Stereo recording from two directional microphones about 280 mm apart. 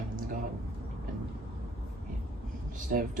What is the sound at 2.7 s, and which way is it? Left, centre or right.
Speech, right.